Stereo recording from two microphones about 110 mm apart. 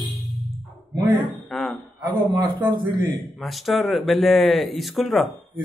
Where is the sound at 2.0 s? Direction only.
40° right (ahead or behind).